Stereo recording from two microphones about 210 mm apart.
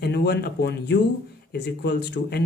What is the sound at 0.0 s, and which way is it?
Speech, 50° left (ahead or behind).